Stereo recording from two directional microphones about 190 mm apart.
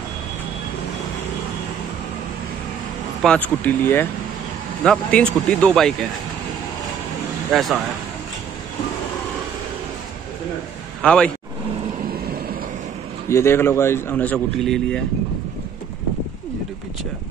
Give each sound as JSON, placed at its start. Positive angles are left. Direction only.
{"t": 3.2, "sound": "a man's voice", "side_deg": 5}
{"t": 7.5, "sound": "speech", "side_deg": 0}
{"t": 11.0, "sound": "speech", "side_deg": 5}
{"t": 12.1, "sound": "vehicle", "side_deg": -50}
{"t": 13.3, "sound": "a man's voice", "side_deg": 15}